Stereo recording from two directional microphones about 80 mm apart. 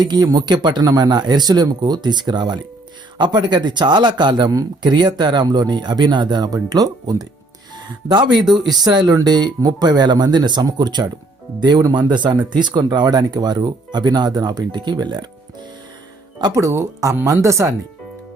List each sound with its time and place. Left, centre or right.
0.0 s speech: right
7.8 s speech: right
16.6 s speech: right